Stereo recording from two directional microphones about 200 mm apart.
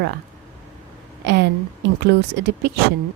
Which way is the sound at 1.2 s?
60° right (ahead or behind).